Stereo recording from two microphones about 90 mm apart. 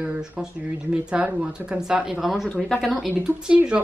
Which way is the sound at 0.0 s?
10° right (ahead or behind).